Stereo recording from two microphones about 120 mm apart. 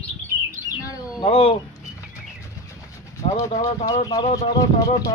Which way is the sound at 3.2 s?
65° left (ahead or behind).